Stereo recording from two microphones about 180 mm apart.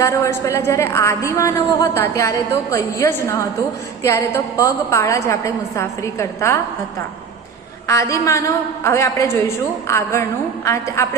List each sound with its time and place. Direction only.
0.0 s a woman's voice: 15° left (ahead or behind)
7.9 s a woman's voice: 15° left (ahead or behind)